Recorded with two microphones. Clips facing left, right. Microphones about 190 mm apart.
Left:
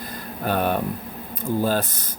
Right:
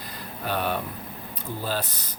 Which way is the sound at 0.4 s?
50° left (ahead or behind).